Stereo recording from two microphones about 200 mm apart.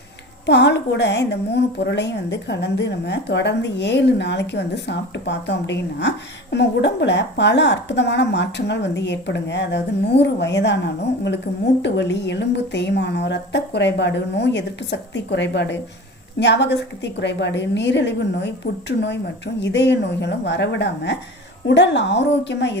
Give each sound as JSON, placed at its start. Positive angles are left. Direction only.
{"t": 0.4, "sound": "a woman's voice", "side_deg": 60}